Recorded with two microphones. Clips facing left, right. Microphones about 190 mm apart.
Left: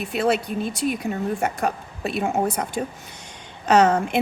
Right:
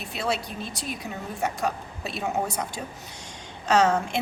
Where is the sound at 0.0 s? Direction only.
55° left (ahead or behind).